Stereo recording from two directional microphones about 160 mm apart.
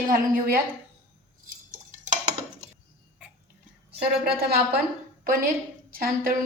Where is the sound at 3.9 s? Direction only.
85° right.